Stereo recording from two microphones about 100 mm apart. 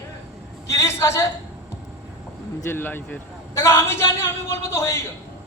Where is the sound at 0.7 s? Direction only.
30° left (ahead or behind).